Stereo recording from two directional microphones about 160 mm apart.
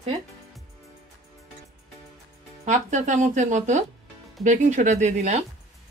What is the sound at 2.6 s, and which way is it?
Speech, 50° right (ahead or behind).